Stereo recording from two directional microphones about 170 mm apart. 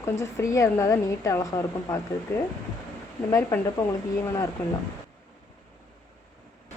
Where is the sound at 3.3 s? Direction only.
15° left (ahead or behind).